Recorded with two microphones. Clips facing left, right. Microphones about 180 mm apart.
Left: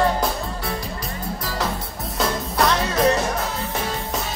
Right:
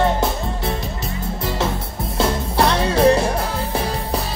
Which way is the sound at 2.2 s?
30° right (ahead or behind).